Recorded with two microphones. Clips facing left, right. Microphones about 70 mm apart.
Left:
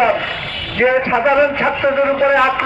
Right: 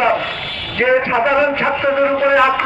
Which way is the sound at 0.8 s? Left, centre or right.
Centre.